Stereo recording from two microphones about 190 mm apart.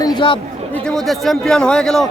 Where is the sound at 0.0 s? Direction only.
25° left (ahead or behind).